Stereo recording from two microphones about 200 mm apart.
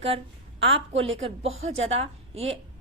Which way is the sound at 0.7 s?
70° right (ahead or behind).